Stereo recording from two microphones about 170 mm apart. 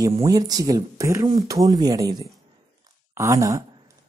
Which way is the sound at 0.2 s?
20° right (ahead or behind).